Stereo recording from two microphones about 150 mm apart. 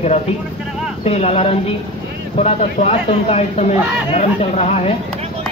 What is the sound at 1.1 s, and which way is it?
Speech, 45° left (ahead or behind).